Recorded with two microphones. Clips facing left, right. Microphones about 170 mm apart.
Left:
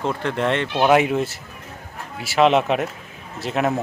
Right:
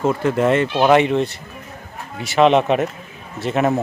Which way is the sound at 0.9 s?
5° left (ahead or behind).